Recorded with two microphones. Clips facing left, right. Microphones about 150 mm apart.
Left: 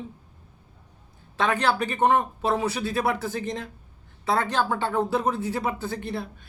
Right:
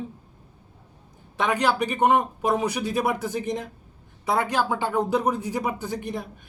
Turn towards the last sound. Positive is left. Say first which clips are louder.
# even
turn(degrees=-15)  # may be behind; listen again after turning